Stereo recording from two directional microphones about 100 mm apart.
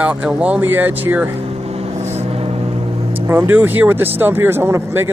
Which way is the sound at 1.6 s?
90° right.